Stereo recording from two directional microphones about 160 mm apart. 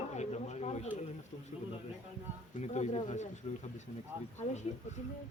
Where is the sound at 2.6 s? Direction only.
45° left (ahead or behind).